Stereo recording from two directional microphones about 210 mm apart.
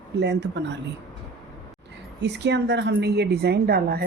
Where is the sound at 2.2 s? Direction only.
55° right (ahead or behind).